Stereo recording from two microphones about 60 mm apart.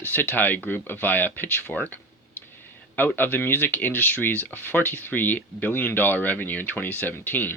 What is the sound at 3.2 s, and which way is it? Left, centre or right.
Speech, left.